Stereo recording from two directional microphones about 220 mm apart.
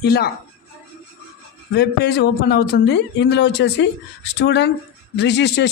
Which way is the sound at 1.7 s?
50° left (ahead or behind).